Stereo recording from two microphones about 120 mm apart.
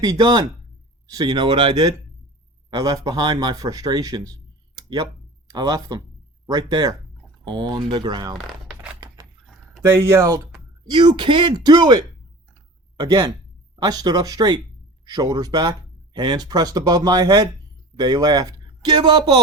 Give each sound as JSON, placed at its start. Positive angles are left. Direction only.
{"t": 0.0, "sound": "speech", "side_deg": -35}
{"t": 8.4, "sound": "a sound", "side_deg": -5}
{"t": 9.8, "sound": "speech", "side_deg": -20}
{"t": 10.8, "sound": "speech", "side_deg": -40}
{"t": 13.0, "sound": "speech", "side_deg": -35}